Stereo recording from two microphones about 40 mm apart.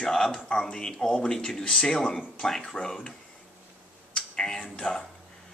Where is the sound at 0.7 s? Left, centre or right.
Left.